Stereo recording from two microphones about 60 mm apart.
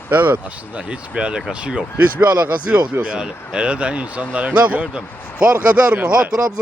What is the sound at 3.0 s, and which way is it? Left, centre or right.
A man's voice, centre.